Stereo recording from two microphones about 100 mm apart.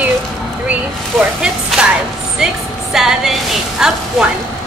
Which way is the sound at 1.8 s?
10° right (ahead or behind).